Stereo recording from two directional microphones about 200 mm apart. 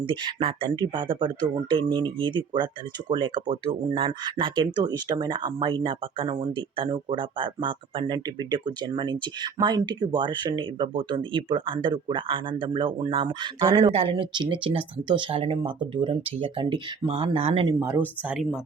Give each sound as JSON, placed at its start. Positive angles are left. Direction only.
{"t": 0.0, "sound": "speech", "side_deg": -25}
{"t": 17.7, "sound": "speech", "side_deg": -10}